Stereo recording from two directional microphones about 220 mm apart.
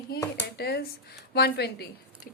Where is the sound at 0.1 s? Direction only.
45° left (ahead or behind).